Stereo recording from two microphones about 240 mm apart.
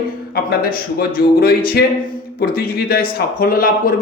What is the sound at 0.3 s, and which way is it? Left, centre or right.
Speech, left.